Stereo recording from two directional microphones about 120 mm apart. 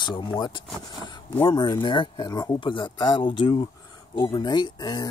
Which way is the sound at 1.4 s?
40° left (ahead or behind).